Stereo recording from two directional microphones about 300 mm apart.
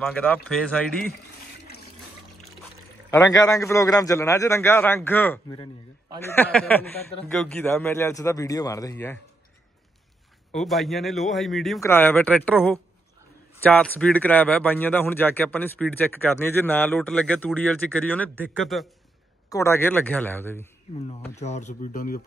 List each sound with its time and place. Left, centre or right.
0.0 s speech: centre
3.1 s a man's voice: centre
10.5 s a man's voice: centre
21.2 s speech: left